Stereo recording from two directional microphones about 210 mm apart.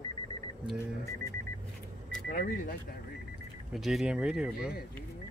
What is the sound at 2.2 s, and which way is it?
Speech, 45° left (ahead or behind).